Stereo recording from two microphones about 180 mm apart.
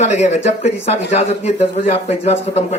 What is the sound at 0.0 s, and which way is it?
Speech, 40° left (ahead or behind).